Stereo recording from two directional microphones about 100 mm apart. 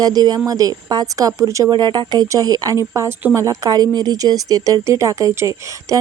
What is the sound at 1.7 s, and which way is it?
Speech, 45° right (ahead or behind).